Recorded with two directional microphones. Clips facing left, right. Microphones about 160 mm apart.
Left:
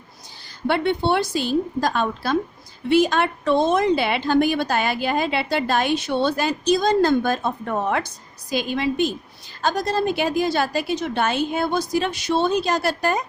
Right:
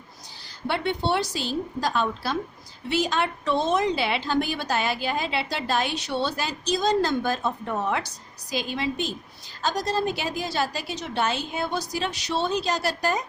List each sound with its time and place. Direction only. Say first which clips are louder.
0.7 s a woman's voice: left 5 dB; 55° left (ahead or behind)